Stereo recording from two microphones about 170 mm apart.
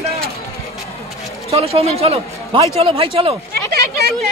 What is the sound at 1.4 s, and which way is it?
A man's voice, 35° right (ahead or behind).